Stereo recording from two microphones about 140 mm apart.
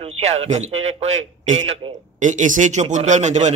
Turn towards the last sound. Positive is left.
turn(degrees=-55)  # may be behind; listen again after turning